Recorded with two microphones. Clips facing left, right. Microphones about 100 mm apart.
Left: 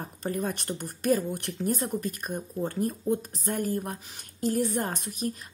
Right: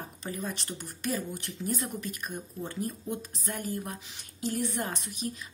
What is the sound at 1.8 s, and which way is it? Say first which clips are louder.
Speech: left 5 dB; 40° left (ahead or behind).